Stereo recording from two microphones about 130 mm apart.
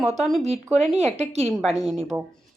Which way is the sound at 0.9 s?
55° right (ahead or behind).